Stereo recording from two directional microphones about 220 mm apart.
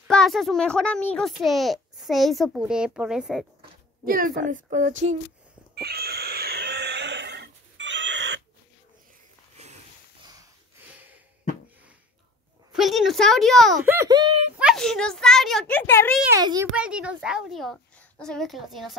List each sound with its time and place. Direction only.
0.1 s a child's voice: centre (ahead or behind)
4.0 s a woman's voice: 40° right (ahead or behind)
5.8 s a sound: 45° right (ahead or behind)
10.9 s a sound: 10° right (ahead or behind)
12.7 s a child's voice: centre (ahead or behind)
13.9 s speech: 20° right (ahead or behind)
14.6 s a child's voice: centre (ahead or behind)
16.2 s a child's voice: 15° right (ahead or behind)
16.7 s a child's voice: 5° right (ahead or behind)